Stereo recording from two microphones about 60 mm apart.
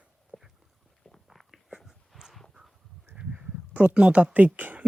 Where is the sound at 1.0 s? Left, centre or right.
Centre.